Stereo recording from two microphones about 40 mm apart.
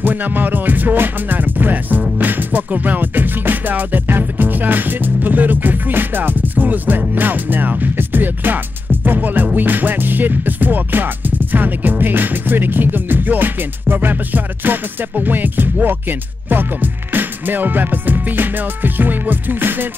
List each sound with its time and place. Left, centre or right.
0.0 s music: right